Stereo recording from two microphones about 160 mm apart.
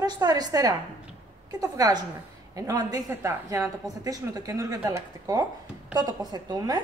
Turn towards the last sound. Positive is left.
turn(degrees=-25)  # may be behind; listen again after turning